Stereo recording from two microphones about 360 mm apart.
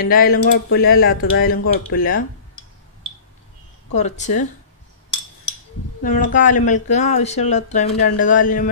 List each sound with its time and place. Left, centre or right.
0.0 s speech: left
3.9 s speech: centre
6.0 s speech: left